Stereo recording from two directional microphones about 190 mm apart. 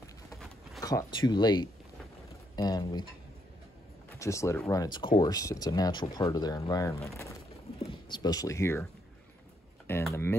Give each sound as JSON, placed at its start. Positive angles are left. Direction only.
{"t": 0.7, "sound": "speech", "side_deg": 20}
{"t": 4.2, "sound": "speech", "side_deg": 15}
{"t": 9.9, "sound": "speech", "side_deg": 10}